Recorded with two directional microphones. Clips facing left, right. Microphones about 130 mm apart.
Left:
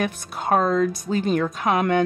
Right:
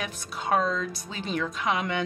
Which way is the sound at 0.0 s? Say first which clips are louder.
Left 7 dB; 50° left (ahead or behind).